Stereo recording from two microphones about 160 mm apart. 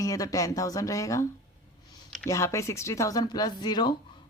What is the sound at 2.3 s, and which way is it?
Speech, 20° left (ahead or behind).